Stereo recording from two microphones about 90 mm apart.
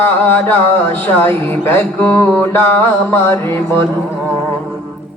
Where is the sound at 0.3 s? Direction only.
20° left (ahead or behind).